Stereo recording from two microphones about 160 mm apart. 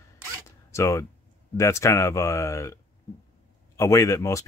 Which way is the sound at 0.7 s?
20° left (ahead or behind).